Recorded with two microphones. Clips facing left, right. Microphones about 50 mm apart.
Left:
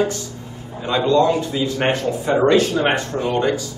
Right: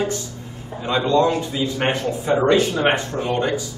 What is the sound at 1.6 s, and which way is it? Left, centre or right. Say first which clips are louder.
Speech: left 2 dB; centre.